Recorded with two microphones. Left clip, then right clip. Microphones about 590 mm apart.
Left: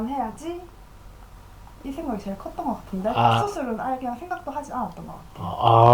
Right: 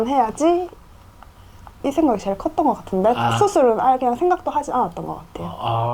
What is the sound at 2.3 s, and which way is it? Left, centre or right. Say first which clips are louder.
Speech: right 11 dB; right.